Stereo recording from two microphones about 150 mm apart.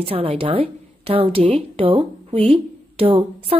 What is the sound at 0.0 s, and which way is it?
A woman's voice, 40° right (ahead or behind).